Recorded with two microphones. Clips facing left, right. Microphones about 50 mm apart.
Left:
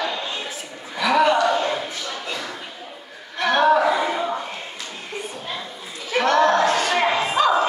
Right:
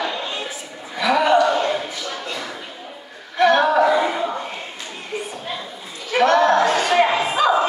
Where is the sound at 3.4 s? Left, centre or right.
Centre.